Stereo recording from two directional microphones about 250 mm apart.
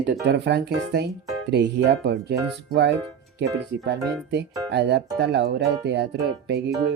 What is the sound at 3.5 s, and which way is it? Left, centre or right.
Speech, right.